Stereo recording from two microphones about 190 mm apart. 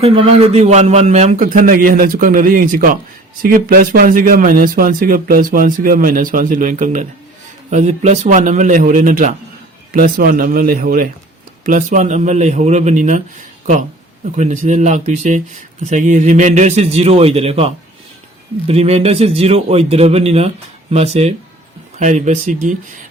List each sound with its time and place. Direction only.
0.0 s a man's voice: 30° right (ahead or behind)
14.3 s a man's voice: 40° right (ahead or behind)
18.7 s a man's voice: 30° right (ahead or behind)